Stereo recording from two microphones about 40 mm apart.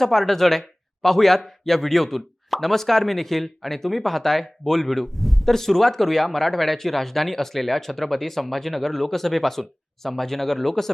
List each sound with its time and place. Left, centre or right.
0.0 s speech: centre